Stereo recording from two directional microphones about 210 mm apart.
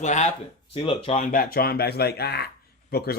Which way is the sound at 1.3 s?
45° left (ahead or behind).